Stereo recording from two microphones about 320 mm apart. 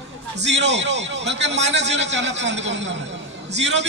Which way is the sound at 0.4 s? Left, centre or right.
Right.